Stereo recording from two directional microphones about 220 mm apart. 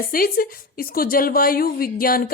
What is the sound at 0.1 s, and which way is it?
Speech, 40° left (ahead or behind).